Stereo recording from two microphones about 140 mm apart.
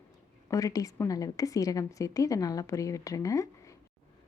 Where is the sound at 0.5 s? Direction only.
25° left (ahead or behind).